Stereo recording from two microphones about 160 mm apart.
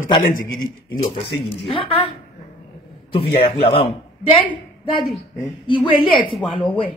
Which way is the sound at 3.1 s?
35° left (ahead or behind).